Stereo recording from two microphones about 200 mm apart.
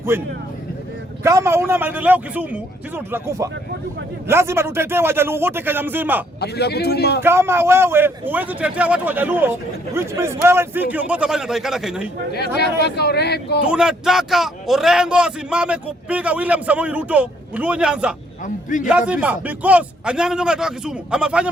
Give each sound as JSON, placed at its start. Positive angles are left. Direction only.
{"t": 0.1, "sound": "a man's voice", "side_deg": -10}
{"t": 6.4, "sound": "a man's voice", "side_deg": 55}
{"t": 7.2, "sound": "a man's voice", "side_deg": -10}
{"t": 12.5, "sound": "speech", "side_deg": 55}
{"t": 13.7, "sound": "a man's voice", "side_deg": -5}
{"t": 18.4, "sound": "a man's voice", "side_deg": 40}
{"t": 18.9, "sound": "a man's voice", "side_deg": -5}